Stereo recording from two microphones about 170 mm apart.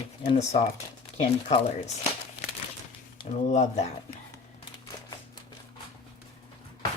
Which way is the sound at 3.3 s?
45° left (ahead or behind).